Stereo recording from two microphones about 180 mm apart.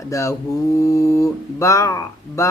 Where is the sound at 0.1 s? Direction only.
15° left (ahead or behind).